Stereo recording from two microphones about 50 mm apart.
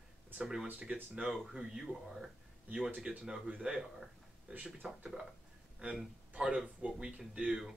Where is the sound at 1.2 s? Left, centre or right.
Centre.